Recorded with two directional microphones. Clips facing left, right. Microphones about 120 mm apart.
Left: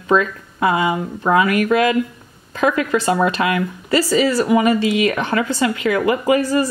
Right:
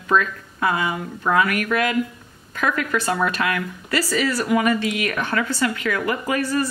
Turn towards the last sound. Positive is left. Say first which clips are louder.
# left 7 dB
turn(degrees=20)  # may be behind; listen again after turning